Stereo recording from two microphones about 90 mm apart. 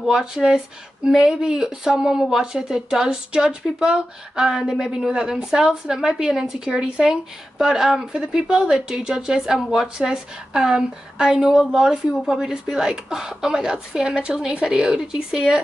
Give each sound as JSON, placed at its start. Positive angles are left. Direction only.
{"t": 0.0, "sound": "a woman's voice", "side_deg": -5}